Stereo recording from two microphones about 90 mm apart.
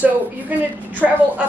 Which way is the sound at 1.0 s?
10° right (ahead or behind).